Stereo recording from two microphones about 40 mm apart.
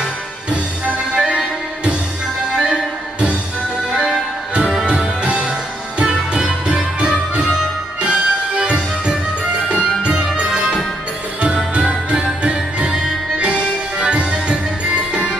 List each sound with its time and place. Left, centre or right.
0.5 s music: right
2.7 s music: right
3.9 s music: centre